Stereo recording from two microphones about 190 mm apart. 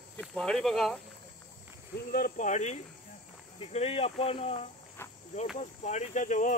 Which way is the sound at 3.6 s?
30° left (ahead or behind).